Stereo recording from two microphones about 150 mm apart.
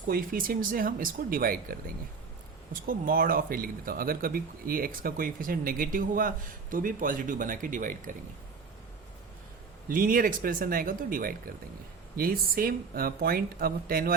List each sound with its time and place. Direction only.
0.0 s speech: 70° right (ahead or behind)
9.9 s speech: 70° right (ahead or behind)